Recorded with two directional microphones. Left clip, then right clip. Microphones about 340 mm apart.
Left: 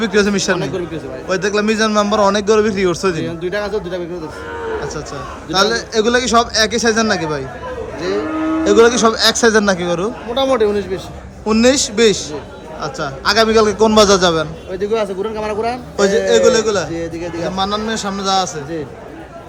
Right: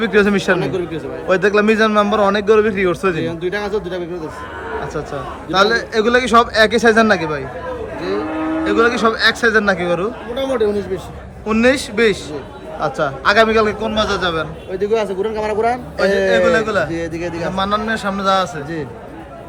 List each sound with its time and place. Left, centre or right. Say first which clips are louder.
0.0 s a man's voice: right 1 dB; centre
8.6 s speech: left 4 dB; centre
10.5 s a man's voice: even; centre
16.9 s a man's voice: even; right
17.5 s a man's voice: right 1 dB; centre